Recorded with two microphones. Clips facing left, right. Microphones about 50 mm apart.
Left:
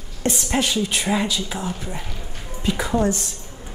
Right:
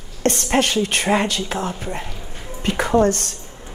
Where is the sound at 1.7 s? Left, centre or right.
Right.